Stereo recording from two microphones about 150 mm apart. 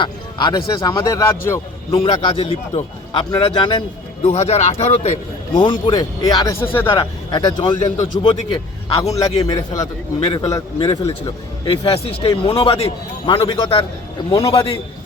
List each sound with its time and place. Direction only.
0.0 s a man's voice: 30° left (ahead or behind)
1.9 s a man's voice: 35° left (ahead or behind)
4.3 s speech: 45° left (ahead or behind)
5.5 s a man's voice: 35° left (ahead or behind)
9.1 s a man's voice: 25° left (ahead or behind)